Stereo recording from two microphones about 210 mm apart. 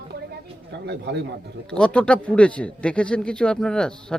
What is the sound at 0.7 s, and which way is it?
Speech, 55° right (ahead or behind).